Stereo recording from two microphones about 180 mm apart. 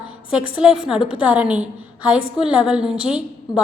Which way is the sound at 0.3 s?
5° right (ahead or behind).